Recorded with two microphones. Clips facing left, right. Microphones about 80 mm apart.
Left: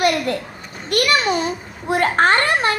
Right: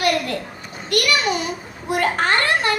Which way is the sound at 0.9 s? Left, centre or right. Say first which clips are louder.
Left 2 dB; left.